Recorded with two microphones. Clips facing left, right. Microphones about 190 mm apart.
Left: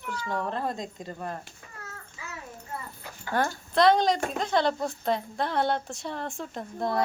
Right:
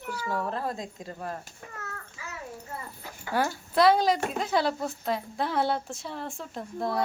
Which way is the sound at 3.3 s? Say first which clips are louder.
Even; 5° right (ahead or behind).